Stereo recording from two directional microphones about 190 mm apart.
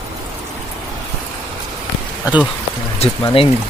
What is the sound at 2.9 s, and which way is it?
Speech, 30° left (ahead or behind).